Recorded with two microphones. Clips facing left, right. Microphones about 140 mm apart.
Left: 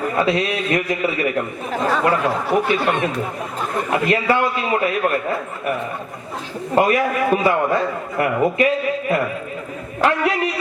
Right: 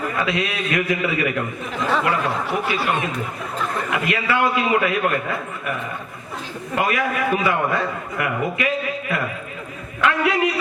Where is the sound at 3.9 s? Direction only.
35° left (ahead or behind).